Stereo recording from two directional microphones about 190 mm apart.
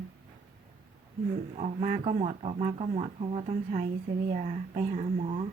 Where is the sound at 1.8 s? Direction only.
35° right (ahead or behind).